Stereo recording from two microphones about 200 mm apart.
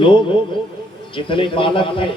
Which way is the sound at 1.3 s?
25° left (ahead or behind).